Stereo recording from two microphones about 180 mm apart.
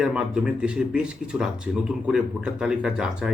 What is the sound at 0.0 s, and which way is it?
Speech, 5° right (ahead or behind).